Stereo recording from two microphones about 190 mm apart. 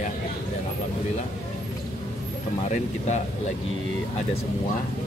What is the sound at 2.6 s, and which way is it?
Speech, 35° left (ahead or behind).